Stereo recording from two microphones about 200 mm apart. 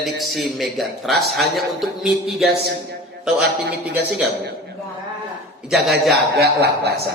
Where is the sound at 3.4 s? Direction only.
55° right (ahead or behind).